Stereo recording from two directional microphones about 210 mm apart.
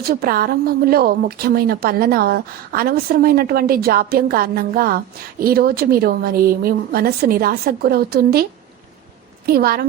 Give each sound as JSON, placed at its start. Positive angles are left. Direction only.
{"t": 0.0, "sound": "a woman's voice", "side_deg": -45}
{"t": 9.5, "sound": "a woman's voice", "side_deg": -45}